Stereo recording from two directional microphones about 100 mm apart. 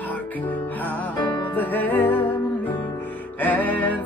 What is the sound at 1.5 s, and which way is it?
Music, 15° left (ahead or behind).